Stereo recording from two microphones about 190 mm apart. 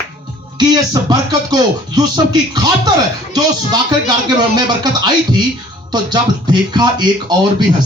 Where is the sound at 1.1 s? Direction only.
20° right (ahead or behind).